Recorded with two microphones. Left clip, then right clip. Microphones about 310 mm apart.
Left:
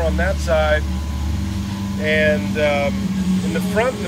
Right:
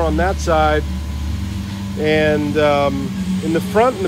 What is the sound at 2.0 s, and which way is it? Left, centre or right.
Speech, right.